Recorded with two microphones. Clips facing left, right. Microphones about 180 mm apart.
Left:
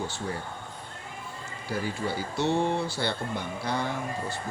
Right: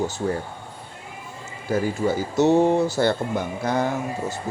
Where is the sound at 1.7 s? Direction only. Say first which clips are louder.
Right 9 dB; 45° right (ahead or behind).